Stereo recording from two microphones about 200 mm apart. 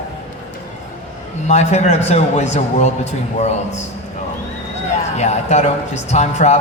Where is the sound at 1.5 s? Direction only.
35° left (ahead or behind).